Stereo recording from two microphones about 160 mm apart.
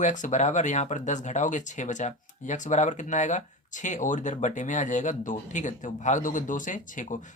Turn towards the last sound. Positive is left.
turn(degrees=55)  # may be behind; listen again after turning